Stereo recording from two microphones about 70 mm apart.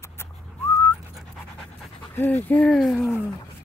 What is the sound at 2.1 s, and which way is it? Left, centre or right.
Speech, left.